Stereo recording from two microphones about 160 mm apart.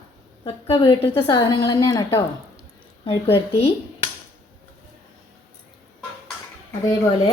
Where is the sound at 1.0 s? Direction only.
10° left (ahead or behind).